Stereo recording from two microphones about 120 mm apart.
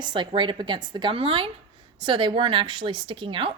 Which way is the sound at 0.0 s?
40° right (ahead or behind).